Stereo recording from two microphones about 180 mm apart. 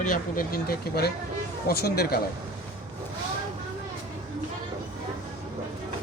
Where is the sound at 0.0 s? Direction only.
50° left (ahead or behind).